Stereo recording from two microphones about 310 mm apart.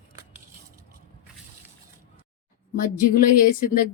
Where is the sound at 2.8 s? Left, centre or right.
Left.